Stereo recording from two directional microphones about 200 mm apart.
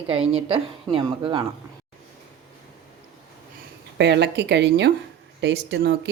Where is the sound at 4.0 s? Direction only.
60° right (ahead or behind).